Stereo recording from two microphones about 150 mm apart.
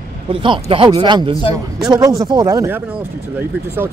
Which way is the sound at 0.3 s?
35° right (ahead or behind).